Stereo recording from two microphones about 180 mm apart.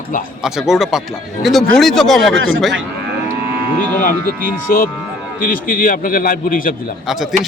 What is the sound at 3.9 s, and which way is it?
A man's voice, 50° left (ahead or behind).